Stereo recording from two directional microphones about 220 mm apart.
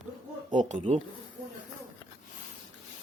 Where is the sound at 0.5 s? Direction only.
35° right (ahead or behind).